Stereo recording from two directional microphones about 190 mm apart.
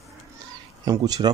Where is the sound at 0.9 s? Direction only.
20° right (ahead or behind).